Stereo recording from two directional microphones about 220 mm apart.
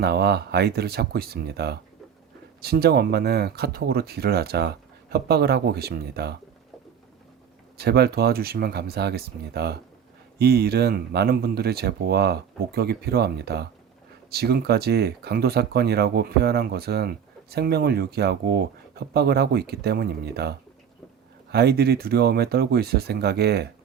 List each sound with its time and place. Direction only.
0.0 s speech: 45° right (ahead or behind)
7.8 s speech: 45° right (ahead or behind)